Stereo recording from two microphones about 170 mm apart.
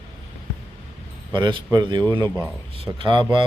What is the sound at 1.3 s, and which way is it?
Speech, 25° right (ahead or behind).